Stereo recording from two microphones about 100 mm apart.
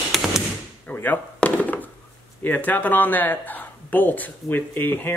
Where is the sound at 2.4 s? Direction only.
20° left (ahead or behind).